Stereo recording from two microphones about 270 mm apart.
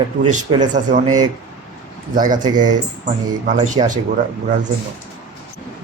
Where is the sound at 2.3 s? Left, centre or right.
Centre.